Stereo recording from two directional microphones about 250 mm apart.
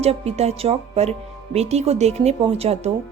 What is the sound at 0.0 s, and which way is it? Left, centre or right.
A woman's voice, right.